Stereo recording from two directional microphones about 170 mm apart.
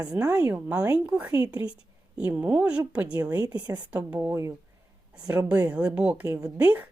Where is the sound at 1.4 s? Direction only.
20° right (ahead or behind).